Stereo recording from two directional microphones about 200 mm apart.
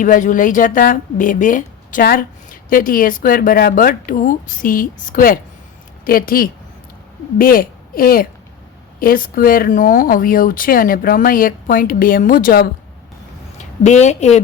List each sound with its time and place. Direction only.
0.0 s a woman's voice: 40° left (ahead or behind)
13.8 s a woman's voice: 35° left (ahead or behind)